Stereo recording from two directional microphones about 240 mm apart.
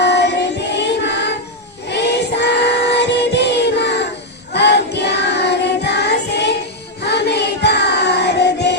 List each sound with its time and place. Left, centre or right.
0.0 s child singing: left
1.9 s music: left